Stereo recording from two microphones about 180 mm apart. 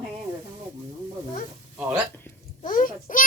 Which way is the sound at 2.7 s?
50° left (ahead or behind).